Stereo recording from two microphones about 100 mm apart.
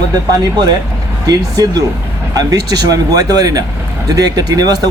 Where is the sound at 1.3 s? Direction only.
40° right (ahead or behind).